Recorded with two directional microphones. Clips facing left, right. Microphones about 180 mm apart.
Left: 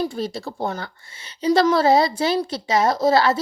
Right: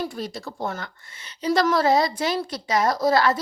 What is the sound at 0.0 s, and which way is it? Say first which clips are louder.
A woman's voice: left 5 dB; 30° left (ahead or behind).